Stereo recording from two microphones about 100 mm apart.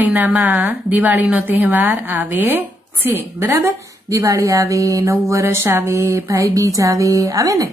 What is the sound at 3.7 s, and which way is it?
Speech, 35° right (ahead or behind).